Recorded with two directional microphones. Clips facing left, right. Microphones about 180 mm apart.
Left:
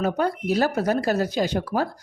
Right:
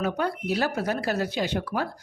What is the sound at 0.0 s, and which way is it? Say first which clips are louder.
Speech: left 4 dB; 40° left (ahead or behind).